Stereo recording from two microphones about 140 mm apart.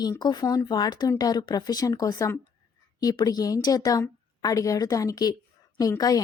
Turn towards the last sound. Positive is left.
turn(degrees=25)  # may be behind; listen again after turning